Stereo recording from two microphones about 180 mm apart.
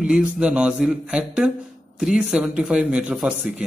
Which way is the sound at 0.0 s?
5° right (ahead or behind).